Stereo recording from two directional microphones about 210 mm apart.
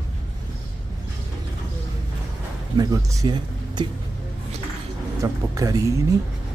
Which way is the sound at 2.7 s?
15° right (ahead or behind).